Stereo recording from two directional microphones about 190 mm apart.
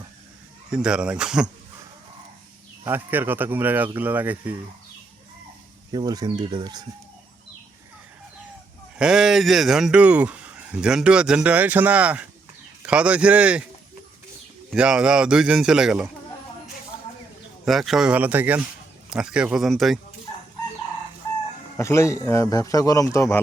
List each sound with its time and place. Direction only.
0.7 s speech: 5° right (ahead or behind)
2.8 s speech: 10° right (ahead or behind)
5.9 s speech: 20° right (ahead or behind)
9.0 s speech: 5° right (ahead or behind)
14.7 s speech: 5° right (ahead or behind)
17.7 s speech: centre (ahead or behind)
21.8 s a man's voice: 15° left (ahead or behind)